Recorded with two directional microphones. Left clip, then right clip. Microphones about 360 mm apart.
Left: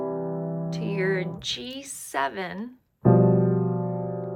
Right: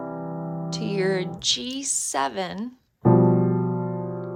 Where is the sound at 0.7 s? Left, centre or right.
Centre.